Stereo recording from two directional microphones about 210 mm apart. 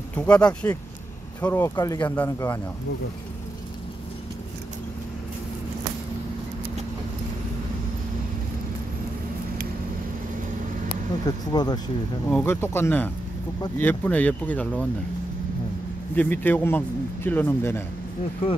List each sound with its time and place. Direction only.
0.1 s speech: 5° left (ahead or behind)
10.9 s speech: 20° left (ahead or behind)
12.3 s speech: 10° left (ahead or behind)
16.2 s speech: 10° left (ahead or behind)